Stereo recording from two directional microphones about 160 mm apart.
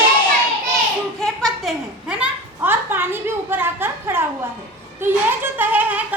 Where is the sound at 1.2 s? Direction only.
Centre (ahead or behind).